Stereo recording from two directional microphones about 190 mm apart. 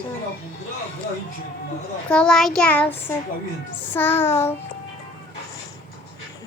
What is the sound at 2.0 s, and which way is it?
Child singing, 5° left (ahead or behind).